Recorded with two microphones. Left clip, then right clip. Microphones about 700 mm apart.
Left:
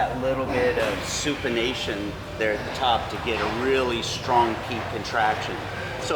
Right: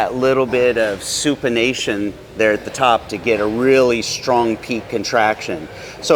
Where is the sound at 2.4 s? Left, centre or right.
Right.